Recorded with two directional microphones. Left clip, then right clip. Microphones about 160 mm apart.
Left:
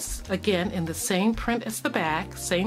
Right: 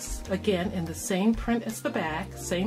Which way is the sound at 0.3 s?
30° left (ahead or behind).